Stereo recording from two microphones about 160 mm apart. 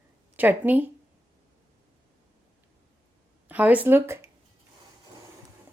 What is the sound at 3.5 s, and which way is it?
Speech, 10° right (ahead or behind).